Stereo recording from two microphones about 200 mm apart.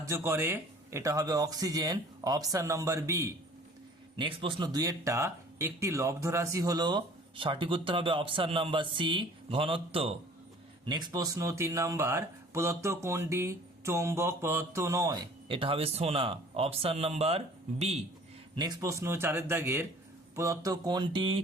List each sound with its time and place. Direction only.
0.0 s speech: 15° right (ahead or behind)
4.2 s speech: 25° right (ahead or behind)
18.5 s speech: 20° right (ahead or behind)